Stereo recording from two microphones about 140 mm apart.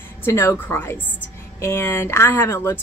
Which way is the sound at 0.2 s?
20° left (ahead or behind).